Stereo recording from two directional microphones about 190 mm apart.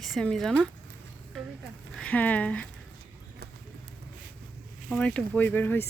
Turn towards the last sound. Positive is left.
turn(degrees=10)  # may be behind; listen again after turning